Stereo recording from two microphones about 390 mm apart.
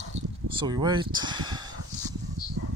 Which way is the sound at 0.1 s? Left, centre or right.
Right.